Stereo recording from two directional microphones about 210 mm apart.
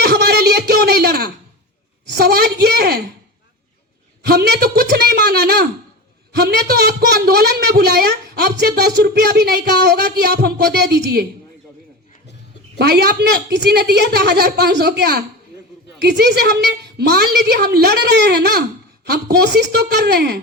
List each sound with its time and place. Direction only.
0.0 s a sound: 50° right (ahead or behind)
2.1 s a woman's voice: 50° right (ahead or behind)
4.2 s a woman's voice: 50° right (ahead or behind)
12.8 s a woman's voice: 50° right (ahead or behind)